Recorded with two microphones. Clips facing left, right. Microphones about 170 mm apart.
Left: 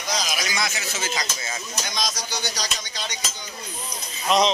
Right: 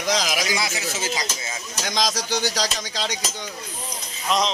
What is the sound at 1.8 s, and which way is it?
Speech, 85° right.